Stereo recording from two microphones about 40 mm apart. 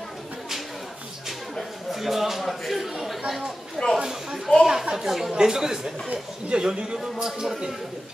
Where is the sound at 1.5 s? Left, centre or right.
Centre.